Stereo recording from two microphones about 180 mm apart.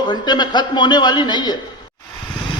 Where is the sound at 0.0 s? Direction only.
25° left (ahead or behind).